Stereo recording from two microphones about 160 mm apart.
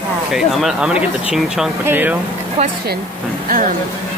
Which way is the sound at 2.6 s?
40° right (ahead or behind).